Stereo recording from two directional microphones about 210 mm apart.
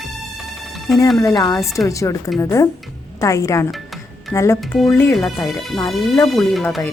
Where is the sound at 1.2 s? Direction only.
15° left (ahead or behind).